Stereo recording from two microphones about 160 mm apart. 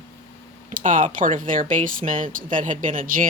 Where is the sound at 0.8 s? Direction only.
55° right (ahead or behind).